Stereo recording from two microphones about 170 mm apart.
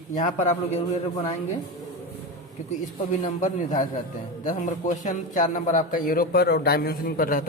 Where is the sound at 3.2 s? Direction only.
50° left (ahead or behind).